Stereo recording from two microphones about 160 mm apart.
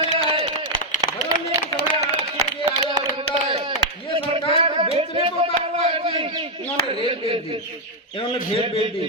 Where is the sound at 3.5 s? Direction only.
35° right (ahead or behind).